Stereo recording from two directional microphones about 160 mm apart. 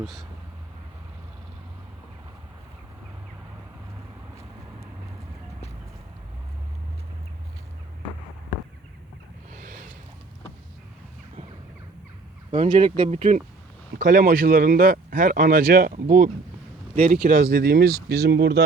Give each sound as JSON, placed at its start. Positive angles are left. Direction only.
{"t": 0.0, "sound": "speech", "side_deg": 0}
{"t": 9.5, "sound": "a sound", "side_deg": -55}
{"t": 12.5, "sound": "speech", "side_deg": -35}
{"t": 13.1, "sound": "speech", "side_deg": -50}
{"t": 18.1, "sound": "speech", "side_deg": -90}